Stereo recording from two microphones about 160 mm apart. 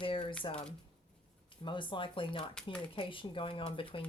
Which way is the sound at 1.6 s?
30° left (ahead or behind).